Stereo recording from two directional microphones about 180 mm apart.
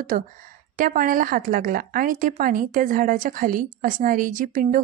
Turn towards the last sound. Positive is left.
turn(degrees=-50)  # may be behind; listen again after turning